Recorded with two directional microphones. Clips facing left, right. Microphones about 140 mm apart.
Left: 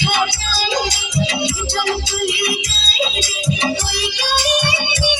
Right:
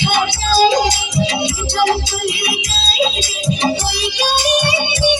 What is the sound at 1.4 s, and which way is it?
Music, 55° right (ahead or behind).